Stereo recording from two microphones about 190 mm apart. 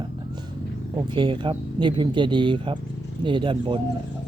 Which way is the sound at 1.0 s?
25° right (ahead or behind).